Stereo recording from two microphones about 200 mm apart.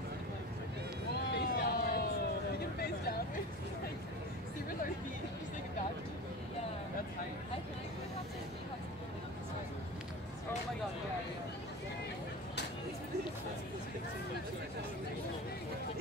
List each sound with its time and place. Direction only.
1.1 s vehicle: 50° left (ahead or behind)